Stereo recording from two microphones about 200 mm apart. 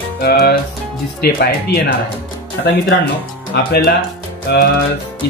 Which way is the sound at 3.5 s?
50° left (ahead or behind).